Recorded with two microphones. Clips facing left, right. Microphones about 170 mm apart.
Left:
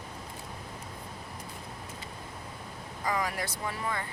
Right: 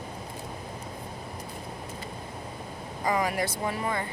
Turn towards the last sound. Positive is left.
turn(degrees=-20)  # may be behind; listen again after turning